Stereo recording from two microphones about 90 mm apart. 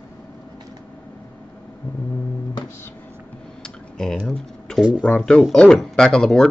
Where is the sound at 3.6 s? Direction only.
5° left (ahead or behind).